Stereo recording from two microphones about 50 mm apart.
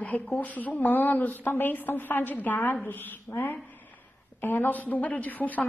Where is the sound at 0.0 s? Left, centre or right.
Left.